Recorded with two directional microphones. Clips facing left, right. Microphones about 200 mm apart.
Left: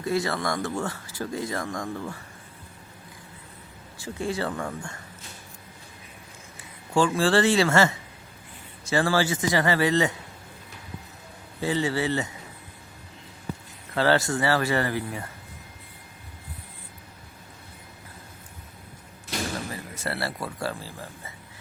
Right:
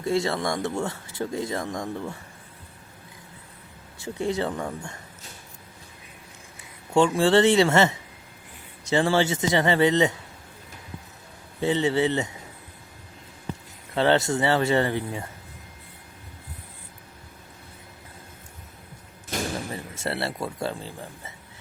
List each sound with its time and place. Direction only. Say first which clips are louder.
0.0 s speech: right 2 dB; 25° right (ahead or behind)
3.9 s speech: right 3 dB; 20° right (ahead or behind)
6.9 s speech: right 3 dB; 25° right (ahead or behind)
11.6 s speech: right 3 dB; 20° right (ahead or behind)
13.9 s speech: right 1 dB; 20° right (ahead or behind)
19.3 s a sound: right 2 dB; 50° right (ahead or behind)
19.7 s speech: right 2 dB; 25° right (ahead or behind)